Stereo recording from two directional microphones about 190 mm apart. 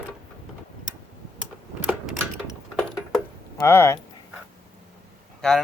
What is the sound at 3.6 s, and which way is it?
Speech, 15° left (ahead or behind).